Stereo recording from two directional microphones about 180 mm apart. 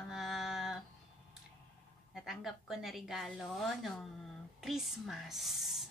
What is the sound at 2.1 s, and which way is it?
A woman's voice, centre (ahead or behind).